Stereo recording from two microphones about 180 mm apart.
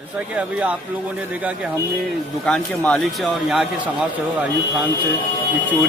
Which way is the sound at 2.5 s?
10° left (ahead or behind).